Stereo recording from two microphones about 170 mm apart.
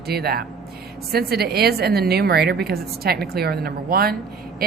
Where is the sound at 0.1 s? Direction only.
65° right (ahead or behind).